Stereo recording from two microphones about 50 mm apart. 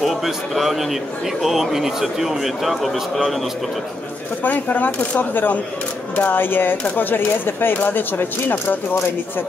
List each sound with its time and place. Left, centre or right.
0.0 s a man's voice: centre
4.4 s speech: left